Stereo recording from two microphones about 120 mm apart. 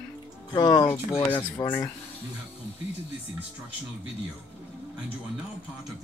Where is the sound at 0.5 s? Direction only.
35° left (ahead or behind).